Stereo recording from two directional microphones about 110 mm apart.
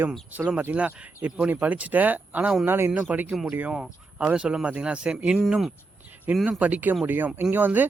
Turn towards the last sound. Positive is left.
turn(degrees=-15)  # may be behind; listen again after turning